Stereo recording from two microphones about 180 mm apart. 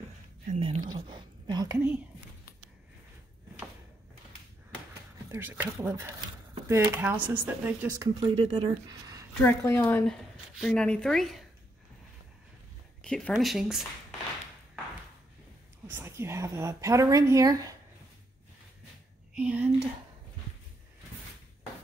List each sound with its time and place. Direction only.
0.5 s whispering: 30° right (ahead or behind)
5.3 s speech: 10° right (ahead or behind)
8.4 s speech: 30° right (ahead or behind)
9.4 s a woman's voice: 10° left (ahead or behind)
13.0 s speech: 5° left (ahead or behind)
15.9 s speech: 15° right (ahead or behind)
19.3 s speech: 10° right (ahead or behind)